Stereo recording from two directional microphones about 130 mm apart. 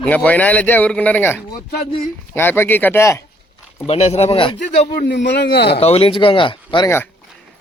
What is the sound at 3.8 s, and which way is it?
Speech, 55° left (ahead or behind).